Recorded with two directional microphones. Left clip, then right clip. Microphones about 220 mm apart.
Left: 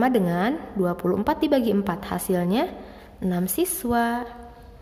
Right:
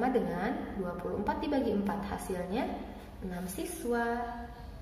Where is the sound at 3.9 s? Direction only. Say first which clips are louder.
Left 7 dB; 45° left (ahead or behind).